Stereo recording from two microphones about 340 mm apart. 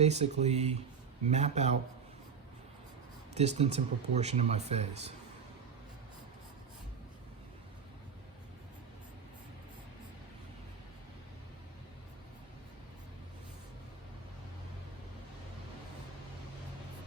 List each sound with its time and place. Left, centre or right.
0.0 s speech: centre
3.3 s speech: centre